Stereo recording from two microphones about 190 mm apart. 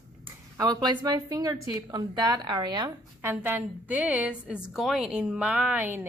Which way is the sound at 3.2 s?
10° right (ahead or behind).